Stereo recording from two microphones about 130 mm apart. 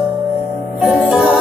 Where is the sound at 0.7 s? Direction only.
10° right (ahead or behind).